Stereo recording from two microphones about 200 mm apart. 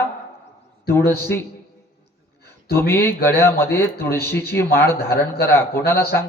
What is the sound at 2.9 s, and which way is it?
A man's voice, 10° left (ahead or behind).